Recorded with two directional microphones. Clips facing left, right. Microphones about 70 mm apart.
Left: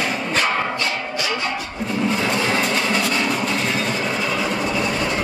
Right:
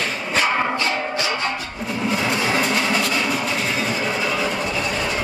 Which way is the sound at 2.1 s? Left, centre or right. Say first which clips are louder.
Right 3 dB; centre.